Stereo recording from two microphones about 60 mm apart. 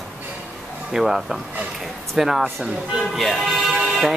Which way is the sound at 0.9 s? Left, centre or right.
Centre.